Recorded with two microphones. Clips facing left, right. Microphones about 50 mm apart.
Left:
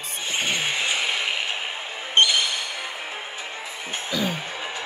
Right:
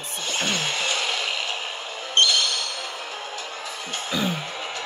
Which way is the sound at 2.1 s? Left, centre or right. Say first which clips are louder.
Left 1 dB; centre.